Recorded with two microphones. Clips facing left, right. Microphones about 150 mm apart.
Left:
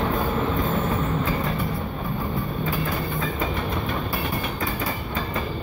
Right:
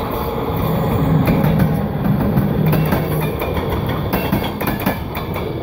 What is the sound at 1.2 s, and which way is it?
Vehicle, 90° right.